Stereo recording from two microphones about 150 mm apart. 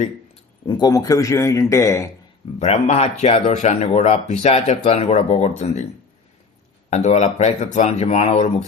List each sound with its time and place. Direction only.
0.6 s a man's voice: 30° left (ahead or behind)
2.6 s speech: 50° left (ahead or behind)
6.9 s speech: 50° left (ahead or behind)